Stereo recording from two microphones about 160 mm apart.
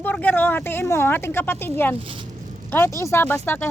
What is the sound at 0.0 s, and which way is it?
Speech, 10° left (ahead or behind).